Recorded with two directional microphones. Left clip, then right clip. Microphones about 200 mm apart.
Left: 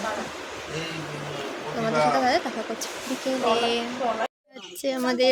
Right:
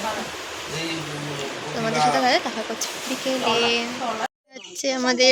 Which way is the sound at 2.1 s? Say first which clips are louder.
Right 2 dB; centre (ahead or behind).